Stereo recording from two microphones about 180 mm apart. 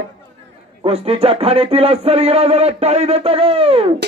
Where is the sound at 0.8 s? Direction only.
30° right (ahead or behind).